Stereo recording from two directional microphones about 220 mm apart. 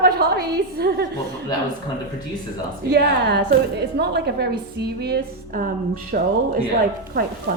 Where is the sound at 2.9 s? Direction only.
50° right (ahead or behind).